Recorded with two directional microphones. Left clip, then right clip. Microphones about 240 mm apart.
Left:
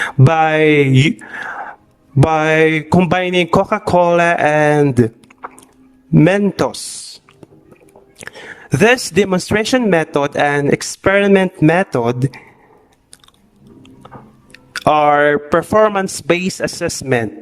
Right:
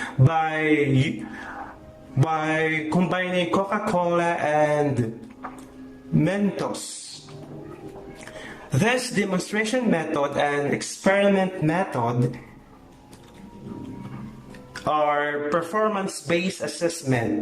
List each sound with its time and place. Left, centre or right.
0.3 s a man's voice: left
8.2 s a man's voice: left
14.8 s a man's voice: left